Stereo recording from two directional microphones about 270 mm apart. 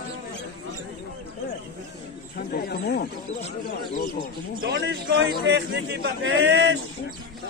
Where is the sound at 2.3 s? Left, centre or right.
Left.